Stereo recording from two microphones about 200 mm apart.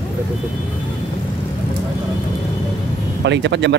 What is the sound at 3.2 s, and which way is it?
Speech, 60° right (ahead or behind).